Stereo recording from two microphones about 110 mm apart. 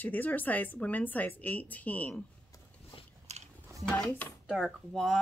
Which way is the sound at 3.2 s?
90° right.